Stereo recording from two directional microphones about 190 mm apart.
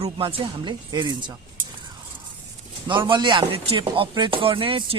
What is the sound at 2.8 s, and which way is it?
Speech, 25° right (ahead or behind).